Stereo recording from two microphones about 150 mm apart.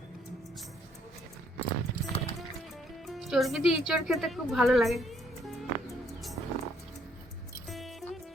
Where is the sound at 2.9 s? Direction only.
Centre (ahead or behind).